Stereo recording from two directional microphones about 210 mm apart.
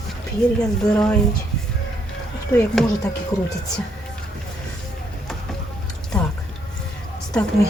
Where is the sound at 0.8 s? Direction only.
5° left (ahead or behind).